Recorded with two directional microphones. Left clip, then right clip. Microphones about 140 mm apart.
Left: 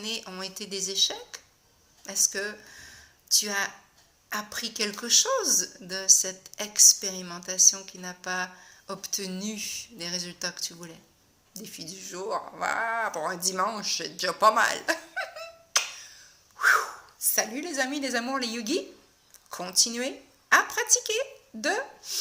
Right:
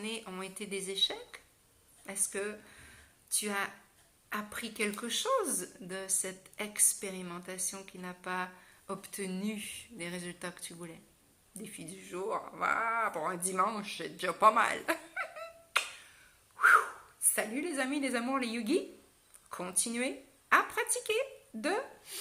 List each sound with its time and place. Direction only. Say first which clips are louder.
0.0 s speech: left 6 dB; 20° right (ahead or behind)
16.6 s a sound: left 2 dB; 15° right (ahead or behind)
17.3 s speech: left 6 dB; 15° right (ahead or behind)